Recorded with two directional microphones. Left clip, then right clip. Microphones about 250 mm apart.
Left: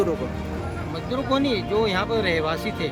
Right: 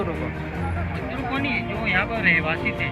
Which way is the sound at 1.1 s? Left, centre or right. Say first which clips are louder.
Left 3 dB; centre.